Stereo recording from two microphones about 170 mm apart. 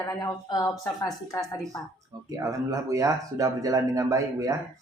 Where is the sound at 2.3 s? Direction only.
20° right (ahead or behind).